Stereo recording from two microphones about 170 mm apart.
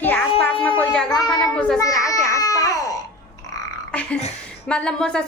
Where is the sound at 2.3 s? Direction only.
20° left (ahead or behind).